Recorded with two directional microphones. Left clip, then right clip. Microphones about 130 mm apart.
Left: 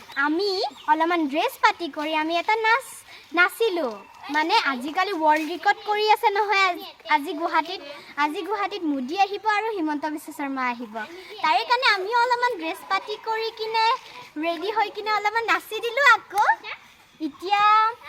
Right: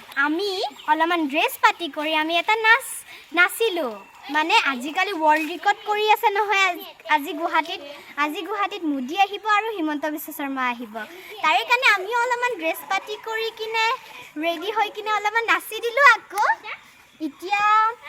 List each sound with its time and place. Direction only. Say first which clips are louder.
0.1 s a woman's voice: right 1 dB; 15° right (ahead or behind)